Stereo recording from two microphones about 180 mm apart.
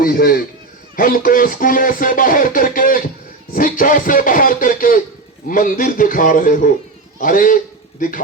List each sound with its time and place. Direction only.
0.0 s a man's voice: 55° left (ahead or behind)